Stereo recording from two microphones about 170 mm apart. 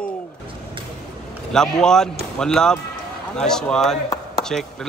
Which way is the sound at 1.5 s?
5° left (ahead or behind).